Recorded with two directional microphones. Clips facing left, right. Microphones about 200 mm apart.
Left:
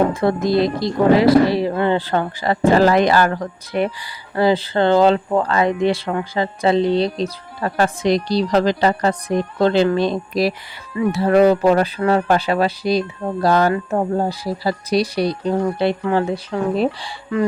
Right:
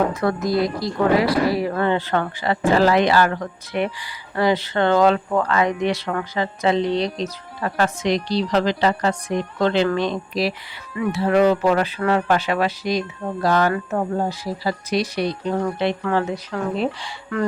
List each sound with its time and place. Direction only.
0.1 s a woman's voice: 25° left (ahead or behind)